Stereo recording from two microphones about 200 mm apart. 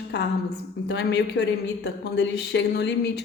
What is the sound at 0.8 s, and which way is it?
Speech, 60° left (ahead or behind).